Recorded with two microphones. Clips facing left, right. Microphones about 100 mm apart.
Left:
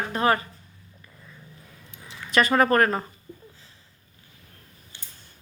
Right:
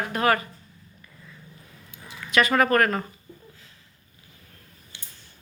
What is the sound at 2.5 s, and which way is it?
Speech, 30° left (ahead or behind).